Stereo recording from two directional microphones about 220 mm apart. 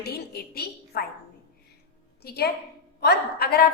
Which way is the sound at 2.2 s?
45° left (ahead or behind).